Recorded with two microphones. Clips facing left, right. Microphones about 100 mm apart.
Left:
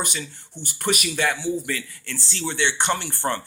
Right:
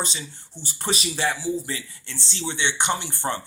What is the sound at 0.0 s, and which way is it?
Speech, 25° right (ahead or behind).